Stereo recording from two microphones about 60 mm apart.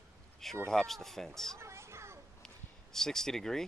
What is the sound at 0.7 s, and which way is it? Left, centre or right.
Speech, centre.